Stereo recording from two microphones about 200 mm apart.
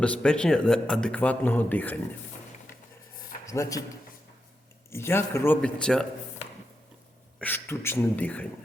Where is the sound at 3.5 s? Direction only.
15° left (ahead or behind).